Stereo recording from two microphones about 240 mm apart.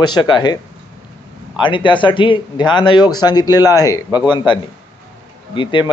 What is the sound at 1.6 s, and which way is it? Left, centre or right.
Speech, left.